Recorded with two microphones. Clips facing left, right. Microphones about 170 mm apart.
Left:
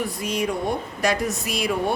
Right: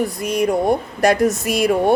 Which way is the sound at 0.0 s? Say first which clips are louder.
Right 6 dB; 45° right (ahead or behind).